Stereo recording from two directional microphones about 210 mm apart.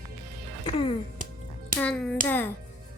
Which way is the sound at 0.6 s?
25° left (ahead or behind).